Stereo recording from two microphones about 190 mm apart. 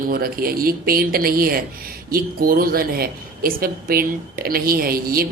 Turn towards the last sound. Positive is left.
turn(degrees=-50)  # may be behind; listen again after turning